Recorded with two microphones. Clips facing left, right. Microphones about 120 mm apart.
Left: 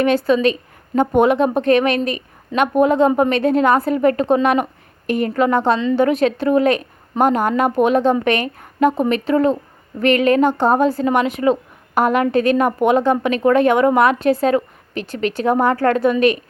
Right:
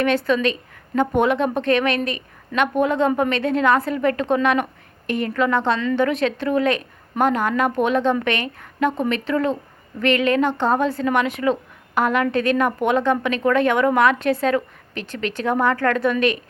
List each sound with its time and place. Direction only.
0.3 s a woman's voice: 35° left (ahead or behind)
2.5 s a woman's voice: 20° left (ahead or behind)
2.8 s a woman's voice: 35° left (ahead or behind)
4.4 s a sound: 35° left (ahead or behind)
5.2 s a woman's voice: 40° left (ahead or behind)
5.7 s a woman's voice: 25° left (ahead or behind)
6.0 s a woman's voice: 35° left (ahead or behind)